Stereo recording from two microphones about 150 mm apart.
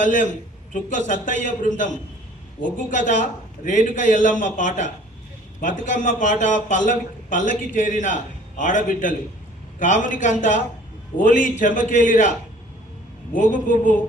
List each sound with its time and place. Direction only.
0.0 s a man's voice: 55° left (ahead or behind)